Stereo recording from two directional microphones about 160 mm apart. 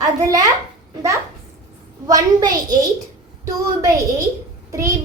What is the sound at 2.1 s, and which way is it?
Speech, 25° right (ahead or behind).